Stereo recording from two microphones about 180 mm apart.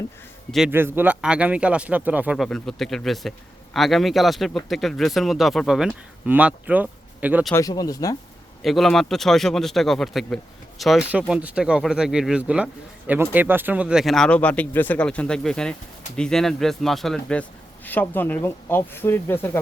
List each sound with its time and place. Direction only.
0.7 s speech: 10° right (ahead or behind)
7.5 s speech: 20° left (ahead or behind)
8.6 s speech: centre (ahead or behind)